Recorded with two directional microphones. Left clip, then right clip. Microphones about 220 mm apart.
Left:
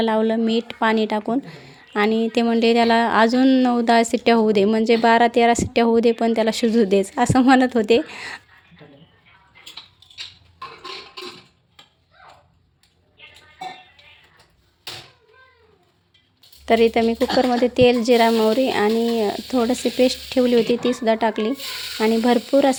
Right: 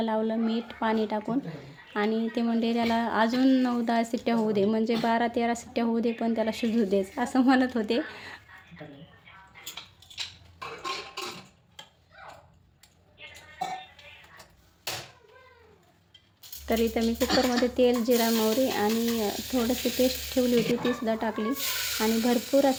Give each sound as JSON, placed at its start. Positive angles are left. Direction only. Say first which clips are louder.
{"t": 0.0, "sound": "speech", "louder": "left 9 dB", "side_deg": 40}
{"t": 16.6, "sound": "speech", "louder": "left 11 dB", "side_deg": 40}